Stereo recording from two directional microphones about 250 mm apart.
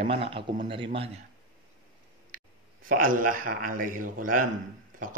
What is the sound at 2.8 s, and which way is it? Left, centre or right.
Speech, right.